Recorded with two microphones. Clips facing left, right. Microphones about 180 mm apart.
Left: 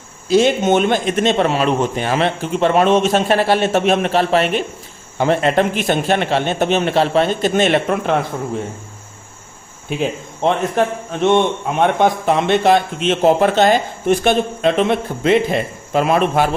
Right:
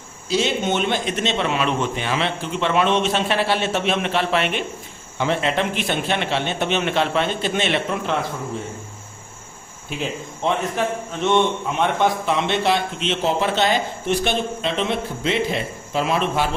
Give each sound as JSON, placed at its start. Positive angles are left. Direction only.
{"t": 0.3, "sound": "a man's voice", "side_deg": 50}
{"t": 10.0, "sound": "a man's voice", "side_deg": 55}